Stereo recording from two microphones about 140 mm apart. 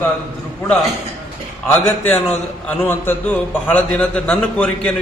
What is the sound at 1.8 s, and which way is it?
A man's voice, 15° left (ahead or behind).